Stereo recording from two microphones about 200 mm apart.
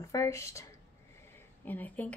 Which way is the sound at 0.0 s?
15° left (ahead or behind).